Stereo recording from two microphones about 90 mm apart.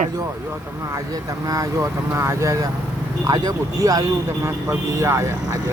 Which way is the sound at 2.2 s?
30° right (ahead or behind).